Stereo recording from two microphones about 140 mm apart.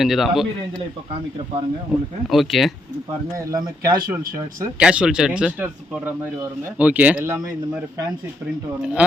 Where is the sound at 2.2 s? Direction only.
Centre (ahead or behind).